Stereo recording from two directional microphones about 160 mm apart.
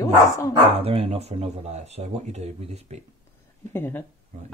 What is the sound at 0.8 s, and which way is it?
Speech, 35° right (ahead or behind).